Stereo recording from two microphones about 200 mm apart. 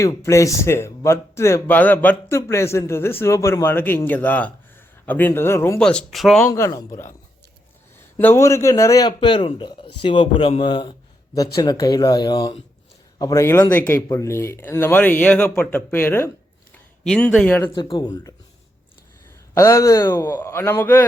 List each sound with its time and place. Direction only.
0.0 s speech: 15° left (ahead or behind)
6.4 s speech: 15° left (ahead or behind)
8.2 s a man's voice: 10° left (ahead or behind)
17.7 s a man's voice: 20° left (ahead or behind)
19.5 s speech: 15° left (ahead or behind)